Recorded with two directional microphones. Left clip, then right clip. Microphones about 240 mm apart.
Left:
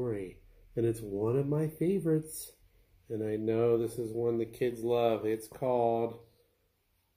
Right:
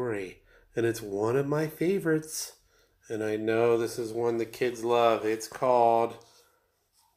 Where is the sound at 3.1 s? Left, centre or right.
Right.